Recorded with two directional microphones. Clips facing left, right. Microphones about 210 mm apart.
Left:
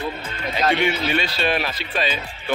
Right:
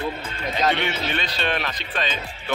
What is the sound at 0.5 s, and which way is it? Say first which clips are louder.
Speech: left 3 dB; 10° left (ahead or behind).